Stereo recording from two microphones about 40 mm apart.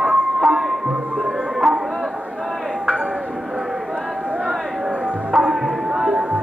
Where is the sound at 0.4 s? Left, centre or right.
Centre.